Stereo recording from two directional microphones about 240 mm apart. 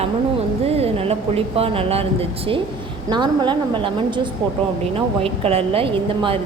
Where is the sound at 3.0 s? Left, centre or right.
Centre.